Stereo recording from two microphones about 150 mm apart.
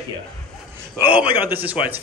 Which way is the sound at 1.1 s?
10° right (ahead or behind).